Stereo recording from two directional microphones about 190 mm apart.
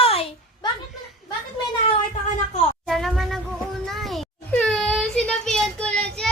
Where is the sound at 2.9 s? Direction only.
Centre (ahead or behind).